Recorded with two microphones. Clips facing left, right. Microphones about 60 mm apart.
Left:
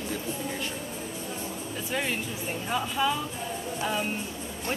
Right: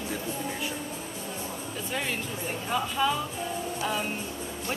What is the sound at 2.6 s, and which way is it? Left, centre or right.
A woman's voice, centre.